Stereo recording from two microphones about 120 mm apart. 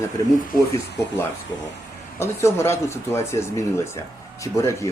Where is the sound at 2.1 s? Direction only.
20° left (ahead or behind).